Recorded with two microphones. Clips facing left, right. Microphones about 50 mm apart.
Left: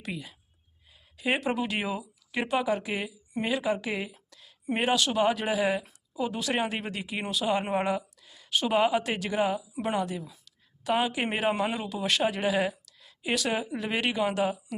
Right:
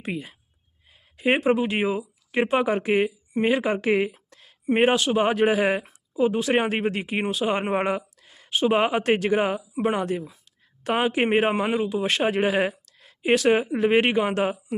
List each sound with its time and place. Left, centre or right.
0.0 s speech: right
8.4 s speech: right
8.8 s speech: right